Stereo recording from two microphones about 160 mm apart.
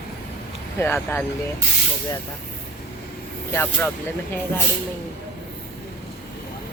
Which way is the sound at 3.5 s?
10° left (ahead or behind).